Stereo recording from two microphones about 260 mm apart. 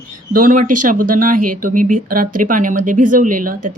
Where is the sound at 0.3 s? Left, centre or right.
Right.